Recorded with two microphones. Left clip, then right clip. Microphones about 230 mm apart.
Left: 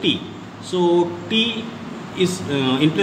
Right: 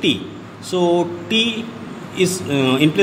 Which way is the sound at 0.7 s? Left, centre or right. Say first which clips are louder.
Right 1 dB; right.